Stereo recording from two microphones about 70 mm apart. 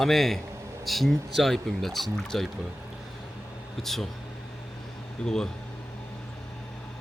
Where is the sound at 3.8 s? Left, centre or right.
Centre.